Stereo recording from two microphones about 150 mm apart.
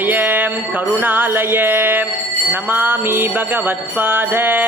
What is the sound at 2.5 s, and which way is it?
Jingle bell, 15° right (ahead or behind).